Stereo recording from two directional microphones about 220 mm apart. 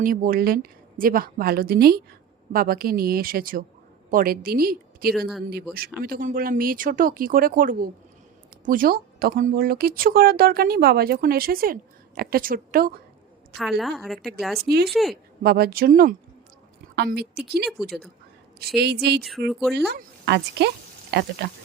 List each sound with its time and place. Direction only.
0.0 s speech: 40° right (ahead or behind)
13.6 s a woman's voice: centre (ahead or behind)
14.6 s speech: 45° right (ahead or behind)
14.8 s a woman's voice: centre (ahead or behind)
15.1 s speech: 45° right (ahead or behind)
19.5 s a woman's voice: centre (ahead or behind)
19.9 s speech: 45° right (ahead or behind)